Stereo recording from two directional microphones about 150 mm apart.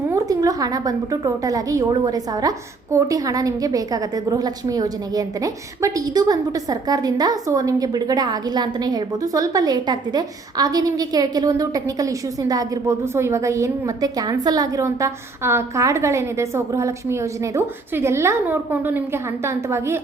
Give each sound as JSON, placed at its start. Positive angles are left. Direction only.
{"t": 0.1, "sound": "a woman's voice", "side_deg": -25}